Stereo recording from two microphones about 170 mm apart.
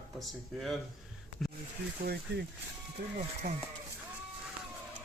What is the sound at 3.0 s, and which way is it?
Speech, 60° right (ahead or behind).